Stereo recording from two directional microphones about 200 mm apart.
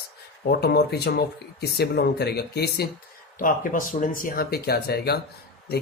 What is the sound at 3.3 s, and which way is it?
Speech, 45° left (ahead or behind).